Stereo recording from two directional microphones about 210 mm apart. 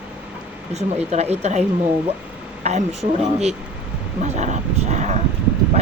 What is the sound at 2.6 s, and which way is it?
Speech, 30° right (ahead or behind).